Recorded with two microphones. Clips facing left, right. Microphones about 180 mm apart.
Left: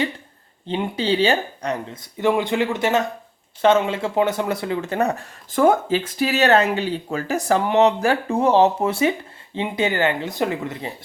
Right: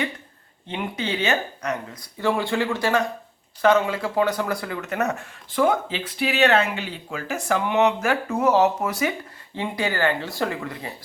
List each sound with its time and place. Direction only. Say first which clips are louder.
0.7 s speech: left 6 dB; 30° left (ahead or behind)